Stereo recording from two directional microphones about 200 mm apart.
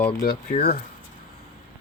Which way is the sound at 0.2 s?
35° left (ahead or behind).